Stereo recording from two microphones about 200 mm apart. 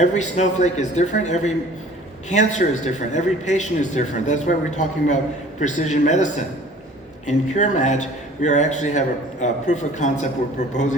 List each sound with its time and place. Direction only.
0.0 s a man's voice: 35° left (ahead or behind)